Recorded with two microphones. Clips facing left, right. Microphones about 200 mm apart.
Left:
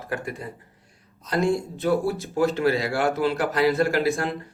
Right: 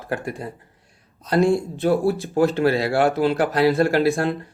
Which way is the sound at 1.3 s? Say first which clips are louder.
Right 5 dB; 30° right (ahead or behind).